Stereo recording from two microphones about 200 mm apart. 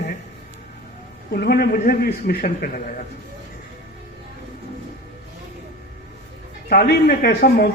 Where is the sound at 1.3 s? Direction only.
50° left (ahead or behind).